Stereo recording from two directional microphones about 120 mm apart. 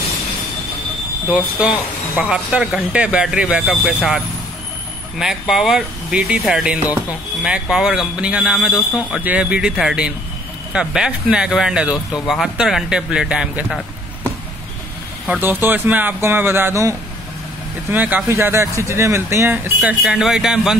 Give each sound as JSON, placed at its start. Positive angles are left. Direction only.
{"t": 1.3, "sound": "speech", "side_deg": -10}
{"t": 5.2, "sound": "speech", "side_deg": -5}
{"t": 15.2, "sound": "speech", "side_deg": -15}
{"t": 17.9, "sound": "speech", "side_deg": -15}
{"t": 18.3, "sound": "speech", "side_deg": -25}